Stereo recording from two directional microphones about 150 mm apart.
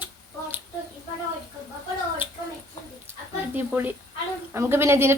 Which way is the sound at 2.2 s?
15° right (ahead or behind).